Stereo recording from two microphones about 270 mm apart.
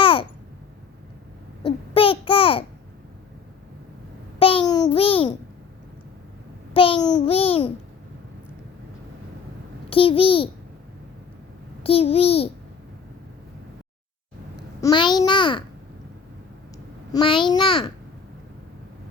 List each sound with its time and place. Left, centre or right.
0.0 s babbling: centre
1.6 s babbling: centre
4.4 s a sound: centre
6.7 s a child's voice: centre
9.9 s a child's voice: centre
11.8 s a child's voice: left
14.8 s a child's voice: centre
17.1 s a child's voice: centre